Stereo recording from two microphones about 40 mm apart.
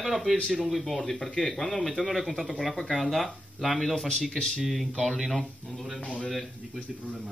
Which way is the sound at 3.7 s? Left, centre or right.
Centre.